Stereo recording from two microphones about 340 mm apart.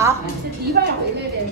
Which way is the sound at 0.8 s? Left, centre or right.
Right.